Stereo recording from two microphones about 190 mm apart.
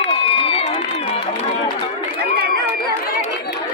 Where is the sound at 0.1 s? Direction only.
30° left (ahead or behind).